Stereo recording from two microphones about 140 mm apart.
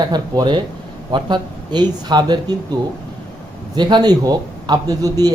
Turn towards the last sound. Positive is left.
turn(degrees=-25)  # may be behind; listen again after turning